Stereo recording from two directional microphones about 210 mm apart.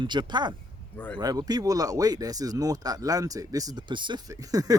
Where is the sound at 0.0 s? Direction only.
20° right (ahead or behind).